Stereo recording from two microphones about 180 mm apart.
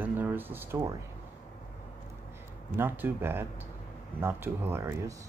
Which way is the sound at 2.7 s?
10° right (ahead or behind).